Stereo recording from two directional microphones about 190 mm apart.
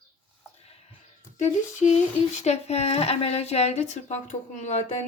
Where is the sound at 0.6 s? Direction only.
35° left (ahead or behind).